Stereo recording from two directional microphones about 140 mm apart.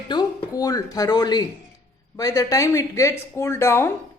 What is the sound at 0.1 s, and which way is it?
Speech, 30° left (ahead or behind).